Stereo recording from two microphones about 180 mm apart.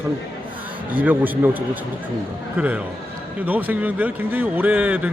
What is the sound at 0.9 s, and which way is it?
A man's voice, 10° right (ahead or behind).